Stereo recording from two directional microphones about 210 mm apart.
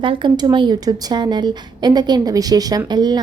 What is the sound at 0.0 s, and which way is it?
A woman's voice, 25° right (ahead or behind).